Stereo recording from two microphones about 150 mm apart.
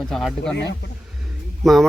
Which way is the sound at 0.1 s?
Centre (ahead or behind).